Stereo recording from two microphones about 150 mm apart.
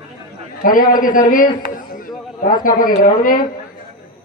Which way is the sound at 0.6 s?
65° left (ahead or behind).